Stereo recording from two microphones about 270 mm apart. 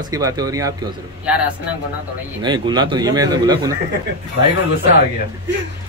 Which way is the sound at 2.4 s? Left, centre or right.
Centre.